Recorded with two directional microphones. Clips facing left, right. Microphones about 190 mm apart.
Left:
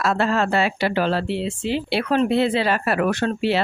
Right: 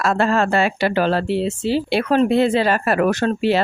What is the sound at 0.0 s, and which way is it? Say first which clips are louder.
Speech: right 3 dB; 50° right (ahead or behind).